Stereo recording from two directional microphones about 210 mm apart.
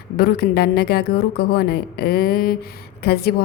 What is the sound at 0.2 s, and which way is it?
A woman's voice, 50° left (ahead or behind).